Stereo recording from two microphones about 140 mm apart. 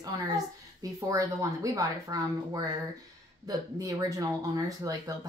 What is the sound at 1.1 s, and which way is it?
A woman's voice, 25° right (ahead or behind).